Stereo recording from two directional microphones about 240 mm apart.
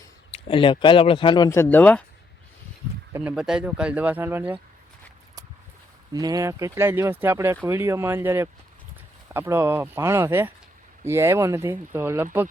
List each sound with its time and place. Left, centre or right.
0.3 s speech: left; by 2.0 s centre
3.1 s speech: centre
6.1 s speech: centre